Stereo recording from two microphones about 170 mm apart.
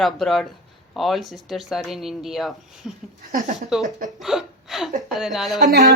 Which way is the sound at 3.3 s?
45° right (ahead or behind).